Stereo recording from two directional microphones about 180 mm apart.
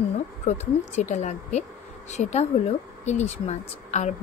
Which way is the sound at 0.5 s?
40° left (ahead or behind).